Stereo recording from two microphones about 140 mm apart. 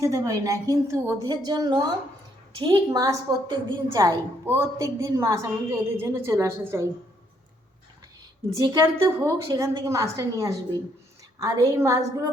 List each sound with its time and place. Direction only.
0.0 s a woman's voice: 25° right (ahead or behind)
8.4 s a woman's voice: 25° right (ahead or behind)